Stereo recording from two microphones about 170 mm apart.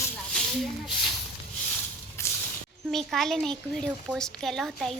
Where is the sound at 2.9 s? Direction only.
Centre (ahead or behind).